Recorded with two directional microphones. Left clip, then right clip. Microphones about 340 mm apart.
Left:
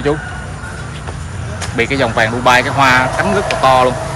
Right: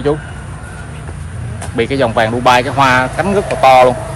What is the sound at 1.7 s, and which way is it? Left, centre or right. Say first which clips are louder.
Speech: right 1 dB; centre.